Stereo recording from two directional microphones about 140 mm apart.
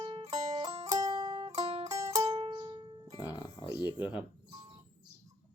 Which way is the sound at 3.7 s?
15° right (ahead or behind).